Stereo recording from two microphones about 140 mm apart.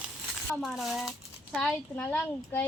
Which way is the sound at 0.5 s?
Centre (ahead or behind).